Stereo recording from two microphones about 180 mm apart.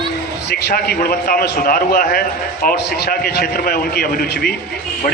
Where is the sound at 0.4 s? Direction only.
55° left (ahead or behind).